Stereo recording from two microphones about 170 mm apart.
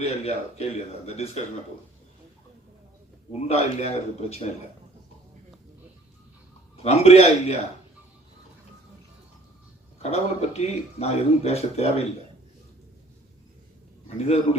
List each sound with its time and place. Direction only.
0.0 s speech: 40° left (ahead or behind)
3.4 s speech: 40° left (ahead or behind)
6.8 s speech: 40° left (ahead or behind)
10.0 s speech: 40° left (ahead or behind)